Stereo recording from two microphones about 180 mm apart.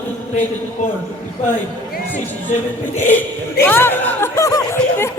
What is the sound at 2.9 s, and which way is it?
Speech, 10° left (ahead or behind).